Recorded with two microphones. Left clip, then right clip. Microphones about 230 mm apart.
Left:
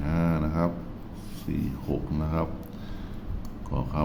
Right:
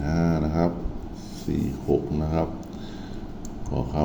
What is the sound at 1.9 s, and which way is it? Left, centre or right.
Speech, left.